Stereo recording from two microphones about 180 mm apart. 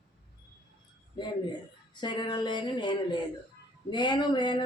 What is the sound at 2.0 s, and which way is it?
Speech, 25° left (ahead or behind).